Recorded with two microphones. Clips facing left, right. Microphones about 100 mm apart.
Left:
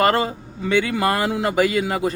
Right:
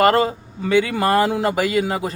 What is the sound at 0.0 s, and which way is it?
A man's voice, 30° right (ahead or behind).